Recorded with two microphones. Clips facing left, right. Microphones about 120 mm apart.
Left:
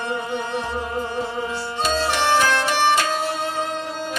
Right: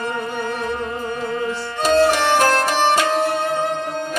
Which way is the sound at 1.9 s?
50° right (ahead or behind).